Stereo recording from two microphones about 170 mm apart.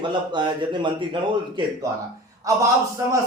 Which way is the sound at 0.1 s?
25° right (ahead or behind).